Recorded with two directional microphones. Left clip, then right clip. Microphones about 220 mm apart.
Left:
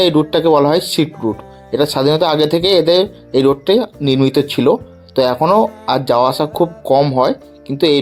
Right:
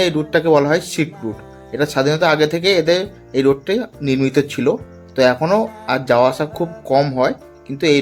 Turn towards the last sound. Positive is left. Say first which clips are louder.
# left 2 dB
turn(degrees=15)  # may be behind; listen again after turning